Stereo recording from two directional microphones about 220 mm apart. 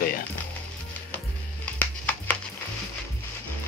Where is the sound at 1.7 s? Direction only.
5° left (ahead or behind).